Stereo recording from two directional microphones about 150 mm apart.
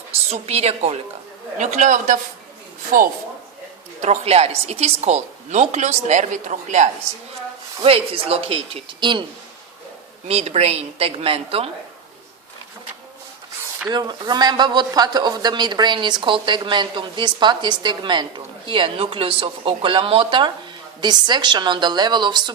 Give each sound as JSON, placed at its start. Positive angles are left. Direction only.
{"t": 0.1, "sound": "a woman's voice", "side_deg": -45}
{"t": 2.9, "sound": "a man's voice", "side_deg": -70}
{"t": 4.0, "sound": "a woman's voice", "side_deg": -45}
{"t": 7.9, "sound": "speech", "side_deg": -40}
{"t": 10.2, "sound": "a woman's voice", "side_deg": -45}
{"t": 13.9, "sound": "speech", "side_deg": -30}